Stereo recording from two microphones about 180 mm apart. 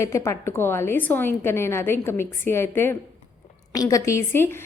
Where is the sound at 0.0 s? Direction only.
15° left (ahead or behind).